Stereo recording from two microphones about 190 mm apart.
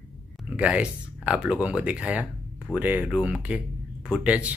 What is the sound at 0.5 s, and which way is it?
Speech, 5° right (ahead or behind).